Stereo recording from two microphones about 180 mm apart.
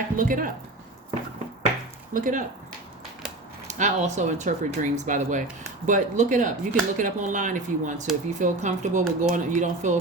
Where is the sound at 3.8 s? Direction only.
40° right (ahead or behind).